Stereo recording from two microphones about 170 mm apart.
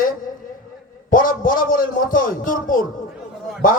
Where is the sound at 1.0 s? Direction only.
55° left (ahead or behind).